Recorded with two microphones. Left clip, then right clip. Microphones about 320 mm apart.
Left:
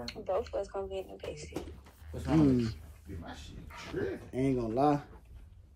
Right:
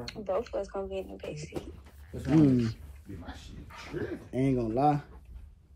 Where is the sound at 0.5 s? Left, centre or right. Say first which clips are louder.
Right 2 dB; right.